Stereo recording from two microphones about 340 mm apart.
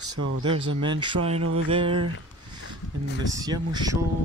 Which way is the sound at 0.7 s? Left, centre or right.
Centre.